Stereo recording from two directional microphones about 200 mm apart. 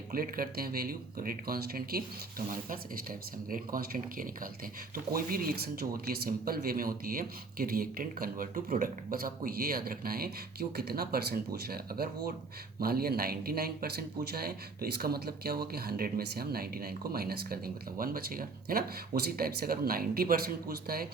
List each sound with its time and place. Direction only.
0.1 s speech: 45° right (ahead or behind)